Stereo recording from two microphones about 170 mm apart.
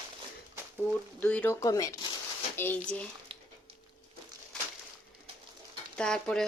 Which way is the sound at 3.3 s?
35° right (ahead or behind).